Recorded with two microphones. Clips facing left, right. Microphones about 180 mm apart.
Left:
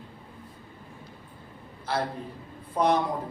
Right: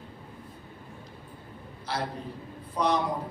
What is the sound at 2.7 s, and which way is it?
Speech, 50° left (ahead or behind).